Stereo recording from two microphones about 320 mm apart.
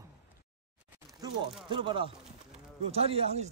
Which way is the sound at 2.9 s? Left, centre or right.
Centre.